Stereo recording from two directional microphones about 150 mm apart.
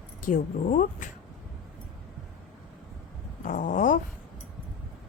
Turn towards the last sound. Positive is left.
turn(degrees=60)  # may be behind; listen again after turning